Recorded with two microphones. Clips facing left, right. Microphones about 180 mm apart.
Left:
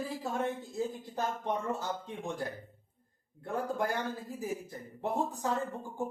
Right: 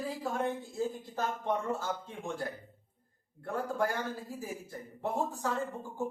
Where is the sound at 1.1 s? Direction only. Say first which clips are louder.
Even; 15° left (ahead or behind).